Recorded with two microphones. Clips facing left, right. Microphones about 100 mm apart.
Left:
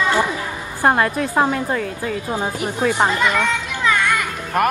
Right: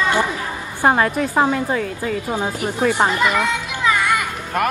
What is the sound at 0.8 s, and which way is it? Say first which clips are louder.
A woman's voice: even; centre (ahead or behind).